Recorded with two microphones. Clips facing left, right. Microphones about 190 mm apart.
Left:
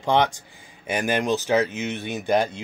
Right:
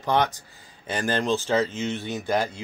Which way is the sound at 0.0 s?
20° left (ahead or behind).